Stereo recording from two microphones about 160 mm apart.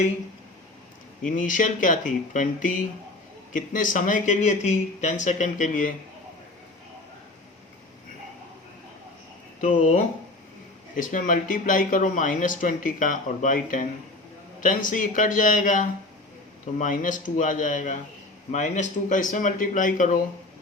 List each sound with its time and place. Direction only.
1.2 s speech: 55° left (ahead or behind)
9.6 s speech: 50° left (ahead or behind)